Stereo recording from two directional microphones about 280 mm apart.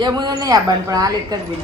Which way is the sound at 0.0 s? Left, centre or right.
Centre.